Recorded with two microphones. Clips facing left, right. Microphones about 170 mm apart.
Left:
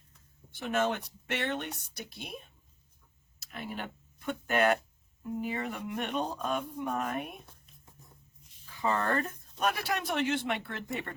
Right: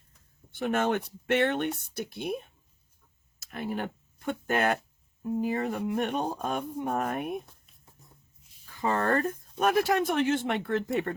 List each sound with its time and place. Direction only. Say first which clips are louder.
0.5 s speech: right 3 dB; 55° right (ahead or behind)
3.4 s speech: right 6 dB; 45° right (ahead or behind)
8.7 s speech: right 3 dB; 50° right (ahead or behind)